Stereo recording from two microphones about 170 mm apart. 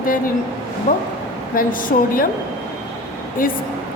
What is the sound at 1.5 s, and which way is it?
Speech, 55° left (ahead or behind).